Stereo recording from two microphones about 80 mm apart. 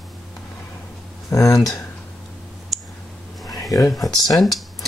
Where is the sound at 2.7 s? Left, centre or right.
Centre.